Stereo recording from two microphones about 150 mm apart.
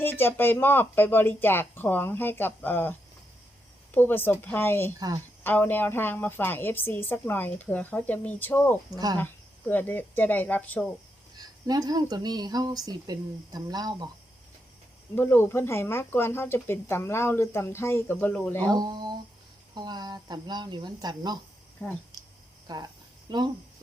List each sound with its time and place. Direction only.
0.0 s speech: 15° left (ahead or behind)
3.9 s speech: 15° left (ahead or behind)
4.9 s speech: 25° right (ahead or behind)
5.4 s speech: 15° left (ahead or behind)
11.3 s speech: 25° right (ahead or behind)
15.1 s speech: 15° left (ahead or behind)
18.8 s speech: 25° right (ahead or behind)
21.8 s speech: 10° left (ahead or behind)
22.6 s speech: 25° right (ahead or behind)